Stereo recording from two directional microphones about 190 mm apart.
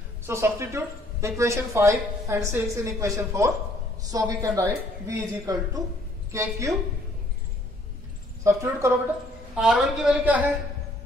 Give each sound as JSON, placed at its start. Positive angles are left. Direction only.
{"t": 0.3, "sound": "speech", "side_deg": -15}
{"t": 8.5, "sound": "speech", "side_deg": -15}
{"t": 9.6, "sound": "speech", "side_deg": 0}